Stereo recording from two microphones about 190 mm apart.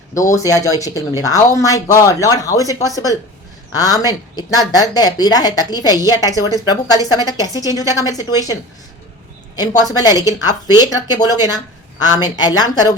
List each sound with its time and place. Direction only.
0.1 s a woman's voice: 15° left (ahead or behind)
9.9 s a woman's voice: 20° left (ahead or behind)